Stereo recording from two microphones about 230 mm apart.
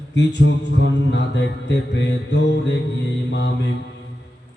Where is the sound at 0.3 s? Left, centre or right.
Left.